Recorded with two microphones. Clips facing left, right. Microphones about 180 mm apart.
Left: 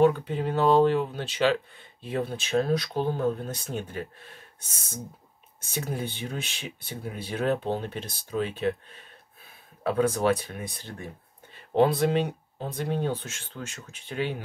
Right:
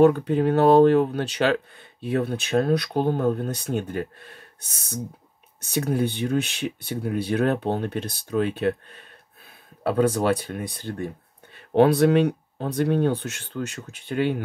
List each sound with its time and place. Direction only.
0.0 s speech: 45° right (ahead or behind)
1.2 s speech: 45° right (ahead or behind)
5.7 s speech: 65° right (ahead or behind)
9.8 s speech: 35° right (ahead or behind)
11.7 s speech: 70° right (ahead or behind)